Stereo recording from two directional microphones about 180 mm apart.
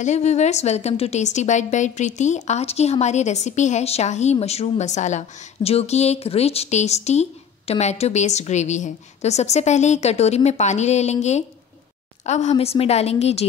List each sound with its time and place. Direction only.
0.0 s a woman's voice: 40° left (ahead or behind)